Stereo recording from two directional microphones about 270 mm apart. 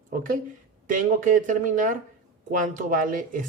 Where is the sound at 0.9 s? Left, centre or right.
Right.